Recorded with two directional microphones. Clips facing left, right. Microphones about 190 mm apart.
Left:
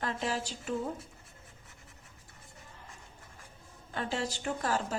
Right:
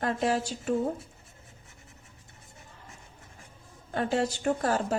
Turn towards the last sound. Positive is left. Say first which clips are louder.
# right 6 dB
turn(degrees=-45)  # may be behind; listen again after turning